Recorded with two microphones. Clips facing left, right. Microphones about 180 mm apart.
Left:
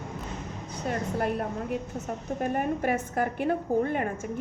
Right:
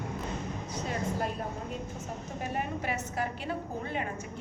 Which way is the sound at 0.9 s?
60° left (ahead or behind).